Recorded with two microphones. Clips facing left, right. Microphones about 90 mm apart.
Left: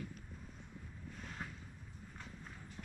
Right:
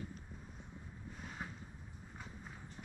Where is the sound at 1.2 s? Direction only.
10° right (ahead or behind).